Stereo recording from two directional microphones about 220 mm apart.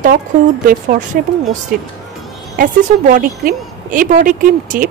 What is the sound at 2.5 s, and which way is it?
A woman's voice, 40° right (ahead or behind).